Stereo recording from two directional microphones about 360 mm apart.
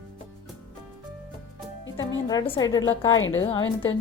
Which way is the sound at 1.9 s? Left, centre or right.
Left.